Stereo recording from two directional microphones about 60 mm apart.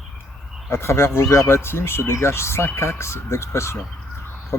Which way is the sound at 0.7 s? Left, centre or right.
Left.